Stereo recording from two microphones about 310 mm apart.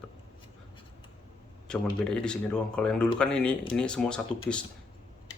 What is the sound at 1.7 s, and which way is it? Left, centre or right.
Speech, centre.